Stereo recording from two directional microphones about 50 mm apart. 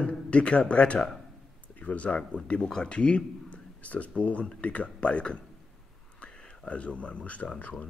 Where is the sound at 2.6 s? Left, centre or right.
Centre.